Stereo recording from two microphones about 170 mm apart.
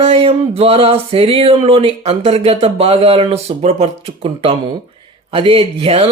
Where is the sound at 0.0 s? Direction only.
35° right (ahead or behind).